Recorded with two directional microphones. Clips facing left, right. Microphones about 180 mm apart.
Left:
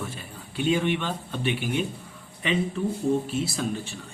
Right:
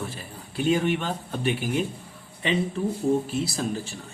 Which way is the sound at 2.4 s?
30° right (ahead or behind).